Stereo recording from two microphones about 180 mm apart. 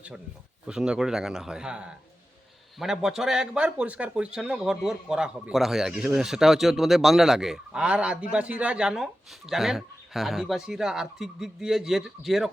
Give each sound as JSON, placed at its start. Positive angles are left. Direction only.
{"t": 0.7, "sound": "a man's voice", "side_deg": -5}